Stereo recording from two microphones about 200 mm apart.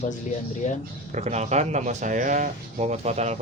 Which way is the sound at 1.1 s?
35° right (ahead or behind).